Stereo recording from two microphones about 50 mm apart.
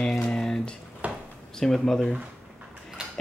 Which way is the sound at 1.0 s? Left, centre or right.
Right.